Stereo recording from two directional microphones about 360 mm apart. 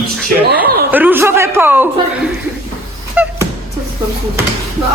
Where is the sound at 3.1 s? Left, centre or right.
Centre.